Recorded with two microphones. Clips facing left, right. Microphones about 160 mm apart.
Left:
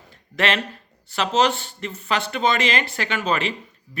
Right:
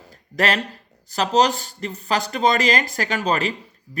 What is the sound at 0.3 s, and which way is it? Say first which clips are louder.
Speech: right 1 dB; 40° right (ahead or behind).